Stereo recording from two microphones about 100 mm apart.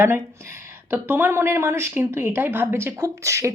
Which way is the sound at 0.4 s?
25° right (ahead or behind).